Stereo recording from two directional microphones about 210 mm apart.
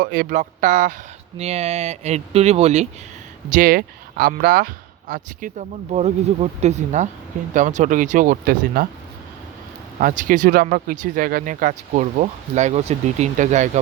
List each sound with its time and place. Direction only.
0.0 s speech: 45° right (ahead or behind)
3.5 s speech: 40° right (ahead or behind)
10.0 s speech: 40° right (ahead or behind)